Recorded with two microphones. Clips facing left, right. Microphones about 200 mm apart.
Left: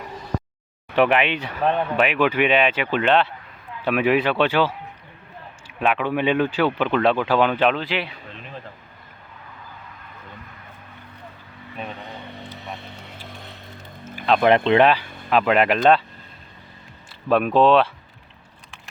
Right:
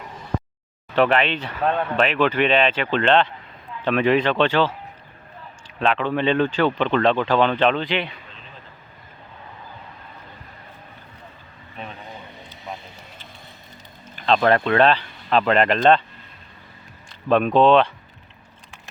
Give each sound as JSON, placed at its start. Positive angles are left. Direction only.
{"t": 0.9, "sound": "speech", "side_deg": 10}
{"t": 12.5, "sound": "vehicle", "side_deg": 70}
{"t": 14.0, "sound": "music", "side_deg": 5}
{"t": 14.5, "sound": "speech", "side_deg": 20}
{"t": 17.2, "sound": "speech", "side_deg": 5}